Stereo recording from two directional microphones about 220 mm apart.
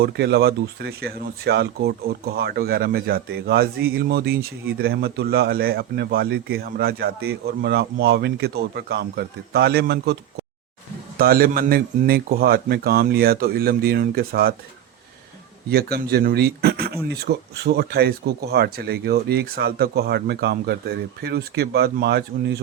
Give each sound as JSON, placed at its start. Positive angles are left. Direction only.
{"t": 0.0, "sound": "speech", "side_deg": -45}
{"t": 11.2, "sound": "speech", "side_deg": -40}
{"t": 15.7, "sound": "speech", "side_deg": -45}